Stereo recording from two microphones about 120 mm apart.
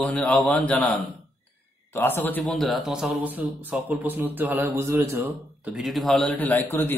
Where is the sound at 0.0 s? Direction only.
10° left (ahead or behind).